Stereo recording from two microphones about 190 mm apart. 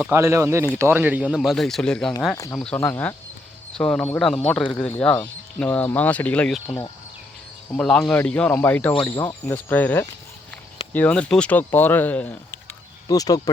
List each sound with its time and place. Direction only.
0.1 s speech: 15° right (ahead or behind); by 2.1 s 5° left (ahead or behind)
2.3 s speech: 15° left (ahead or behind)
7.7 s speech: 5° left (ahead or behind)
13.1 s speech: 20° left (ahead or behind)